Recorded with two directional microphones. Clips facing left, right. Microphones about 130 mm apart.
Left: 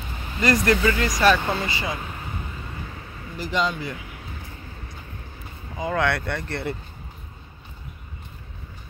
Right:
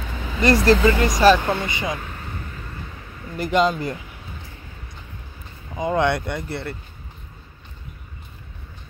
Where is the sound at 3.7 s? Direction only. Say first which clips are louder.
Right 4 dB; 40° right (ahead or behind).